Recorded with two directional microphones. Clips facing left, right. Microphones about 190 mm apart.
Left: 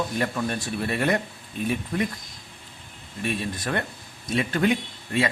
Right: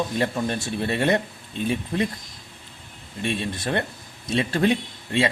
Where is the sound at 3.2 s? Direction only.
25° right (ahead or behind).